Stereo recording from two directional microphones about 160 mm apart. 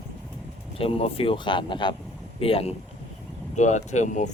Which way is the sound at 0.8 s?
35° left (ahead or behind).